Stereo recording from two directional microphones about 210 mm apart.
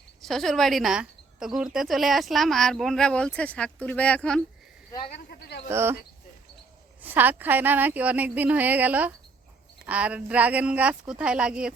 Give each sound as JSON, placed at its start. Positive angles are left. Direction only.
{"t": 0.2, "sound": "speech", "side_deg": 0}
{"t": 4.9, "sound": "speech", "side_deg": 20}
{"t": 5.3, "sound": "speech", "side_deg": 50}
{"t": 5.6, "sound": "a woman's voice", "side_deg": -10}
{"t": 7.0, "sound": "a woman's voice", "side_deg": -10}